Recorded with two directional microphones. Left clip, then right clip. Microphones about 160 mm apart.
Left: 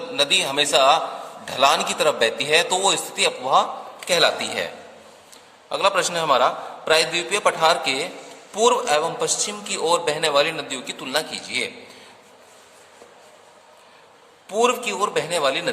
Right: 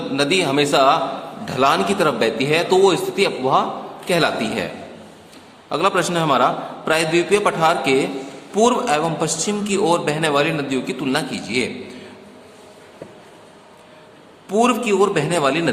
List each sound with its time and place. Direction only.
0.2 s a man's voice: 25° left (ahead or behind)
14.5 s a man's voice: 25° left (ahead or behind)